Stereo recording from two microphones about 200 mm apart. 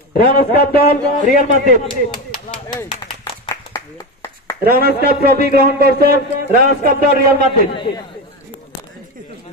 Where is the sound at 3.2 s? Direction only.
15° left (ahead or behind).